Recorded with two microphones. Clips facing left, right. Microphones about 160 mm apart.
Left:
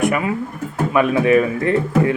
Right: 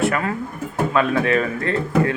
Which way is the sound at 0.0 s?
15° left (ahead or behind).